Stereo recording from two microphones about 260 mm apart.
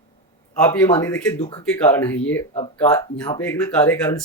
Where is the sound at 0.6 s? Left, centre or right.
Centre.